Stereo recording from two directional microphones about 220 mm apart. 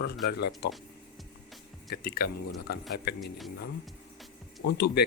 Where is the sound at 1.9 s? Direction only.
45° left (ahead or behind).